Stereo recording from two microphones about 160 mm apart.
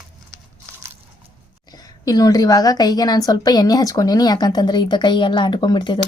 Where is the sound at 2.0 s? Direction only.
20° left (ahead or behind).